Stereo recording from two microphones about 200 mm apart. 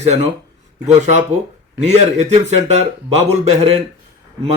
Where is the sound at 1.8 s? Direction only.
35° right (ahead or behind).